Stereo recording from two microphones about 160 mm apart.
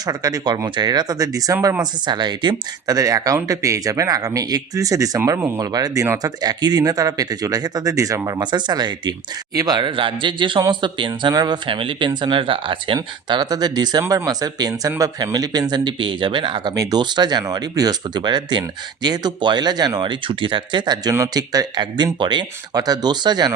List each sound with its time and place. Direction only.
0.0 s speech: 25° right (ahead or behind)